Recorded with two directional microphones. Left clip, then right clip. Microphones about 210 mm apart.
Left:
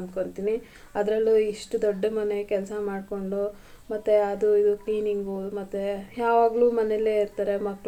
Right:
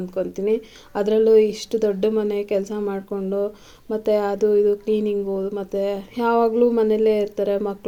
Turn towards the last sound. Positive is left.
turn(degrees=-45)  # may be behind; listen again after turning